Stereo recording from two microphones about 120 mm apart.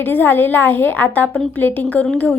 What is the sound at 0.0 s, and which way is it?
A woman's voice, 15° left (ahead or behind).